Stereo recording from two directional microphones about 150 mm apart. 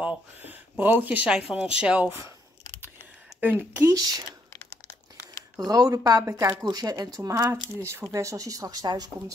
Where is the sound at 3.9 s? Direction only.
25° right (ahead or behind).